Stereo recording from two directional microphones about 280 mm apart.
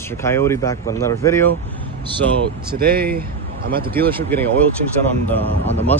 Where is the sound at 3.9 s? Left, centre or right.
Centre.